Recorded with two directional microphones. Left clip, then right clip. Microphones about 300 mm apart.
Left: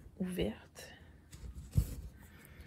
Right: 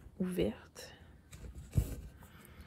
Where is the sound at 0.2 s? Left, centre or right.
Centre.